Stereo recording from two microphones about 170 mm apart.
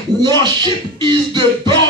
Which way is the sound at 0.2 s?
25° right (ahead or behind).